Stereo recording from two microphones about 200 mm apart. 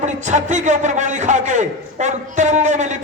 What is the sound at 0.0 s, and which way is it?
A man's voice, 35° right (ahead or behind).